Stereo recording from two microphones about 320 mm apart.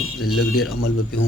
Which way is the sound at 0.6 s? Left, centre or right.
Left.